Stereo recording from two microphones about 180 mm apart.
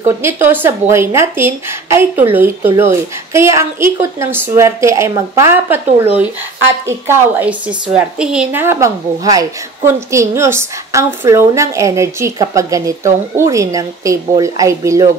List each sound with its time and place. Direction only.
0.0 s a woman's voice: 10° right (ahead or behind)